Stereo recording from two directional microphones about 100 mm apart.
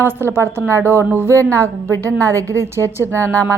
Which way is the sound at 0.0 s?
25° right (ahead or behind).